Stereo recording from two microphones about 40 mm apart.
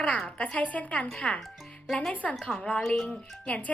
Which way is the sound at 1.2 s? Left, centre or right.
Centre.